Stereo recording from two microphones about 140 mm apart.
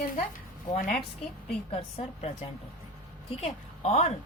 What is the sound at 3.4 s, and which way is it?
Speech, 50° left (ahead or behind).